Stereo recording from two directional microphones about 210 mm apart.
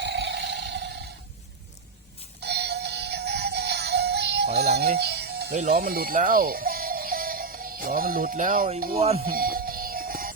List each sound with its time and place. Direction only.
0.0 s music: 55° right (ahead or behind)
2.4 s synthetic singing: 50° right (ahead or behind)
4.9 s music: 50° right (ahead or behind)
5.6 s speech: 45° right (ahead or behind)
9.0 s speech: 30° right (ahead or behind)
9.2 s music: 45° right (ahead or behind)